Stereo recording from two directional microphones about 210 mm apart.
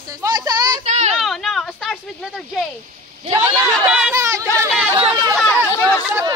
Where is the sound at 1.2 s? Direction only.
Centre (ahead or behind).